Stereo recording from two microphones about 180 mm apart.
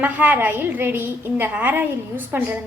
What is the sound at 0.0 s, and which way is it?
A woman's voice, 10° right (ahead or behind).